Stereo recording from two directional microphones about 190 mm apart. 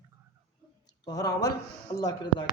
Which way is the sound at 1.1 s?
20° left (ahead or behind).